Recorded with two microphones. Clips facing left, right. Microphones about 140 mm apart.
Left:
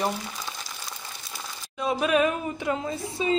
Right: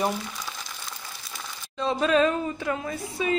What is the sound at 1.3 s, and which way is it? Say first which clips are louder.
Speech: right 1 dB; 10° left (ahead or behind).